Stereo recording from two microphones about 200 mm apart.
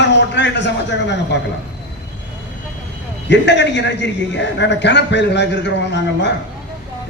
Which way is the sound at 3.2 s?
60° left (ahead or behind).